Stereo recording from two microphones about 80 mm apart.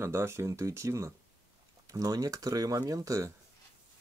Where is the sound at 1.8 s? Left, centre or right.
Right.